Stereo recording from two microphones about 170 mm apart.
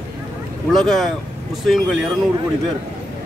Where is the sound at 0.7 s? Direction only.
Centre (ahead or behind).